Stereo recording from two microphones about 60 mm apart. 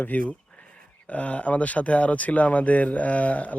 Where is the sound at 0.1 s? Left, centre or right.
Left.